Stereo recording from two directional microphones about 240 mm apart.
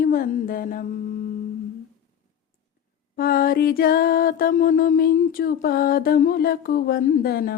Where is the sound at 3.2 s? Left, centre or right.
Left.